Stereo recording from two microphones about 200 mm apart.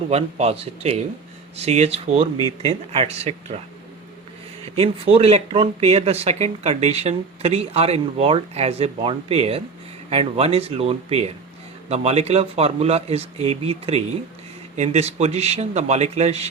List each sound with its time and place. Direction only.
0.1 s speech: 30° right (ahead or behind)
4.7 s speech: 30° right (ahead or behind)